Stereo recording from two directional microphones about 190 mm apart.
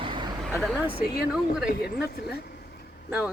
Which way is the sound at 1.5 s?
55° left (ahead or behind).